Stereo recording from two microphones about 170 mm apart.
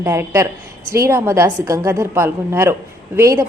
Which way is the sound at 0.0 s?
15° right (ahead or behind).